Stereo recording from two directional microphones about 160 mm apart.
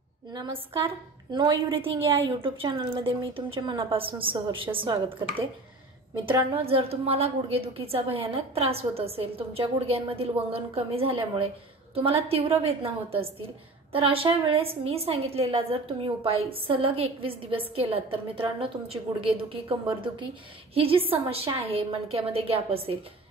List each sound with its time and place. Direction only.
0.3 s a woman's voice: 30° right (ahead or behind)
6.1 s a woman's voice: 30° right (ahead or behind)